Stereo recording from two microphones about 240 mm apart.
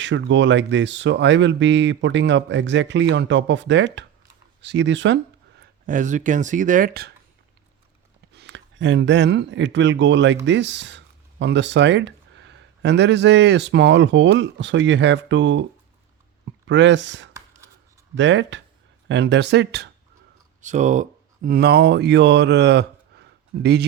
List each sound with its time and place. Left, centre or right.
0.0 s speech: right
8.3 s speech: right
16.6 s speech: right
17.3 s a sound: centre
18.2 s speech: right
20.6 s speech: right